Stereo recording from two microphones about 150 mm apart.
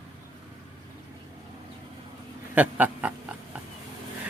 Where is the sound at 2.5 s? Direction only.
10° right (ahead or behind).